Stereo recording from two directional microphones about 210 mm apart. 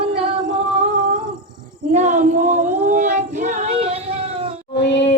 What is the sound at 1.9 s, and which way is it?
Female singing, 35° right (ahead or behind).